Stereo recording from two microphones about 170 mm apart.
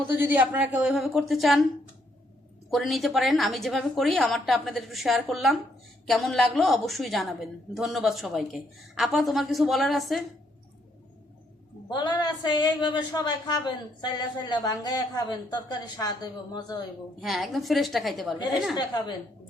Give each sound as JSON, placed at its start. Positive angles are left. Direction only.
{"t": 0.2, "sound": "a woman's voice", "side_deg": -10}
{"t": 2.6, "sound": "a woman's voice", "side_deg": 0}
{"t": 11.9, "sound": "a woman's voice", "side_deg": 25}
{"t": 17.2, "sound": "a woman's voice", "side_deg": 0}